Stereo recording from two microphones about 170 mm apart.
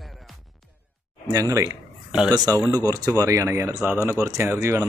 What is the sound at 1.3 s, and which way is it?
Speech, 20° right (ahead or behind).